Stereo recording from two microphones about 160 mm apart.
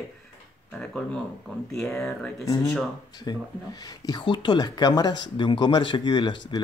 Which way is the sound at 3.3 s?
25° left (ahead or behind).